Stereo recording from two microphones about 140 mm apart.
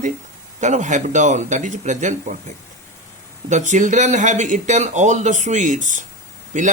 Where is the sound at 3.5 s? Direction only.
60° right (ahead or behind).